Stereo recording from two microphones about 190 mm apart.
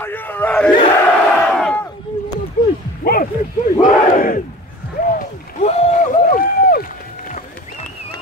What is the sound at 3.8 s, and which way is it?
Battle cry, 45° left (ahead or behind).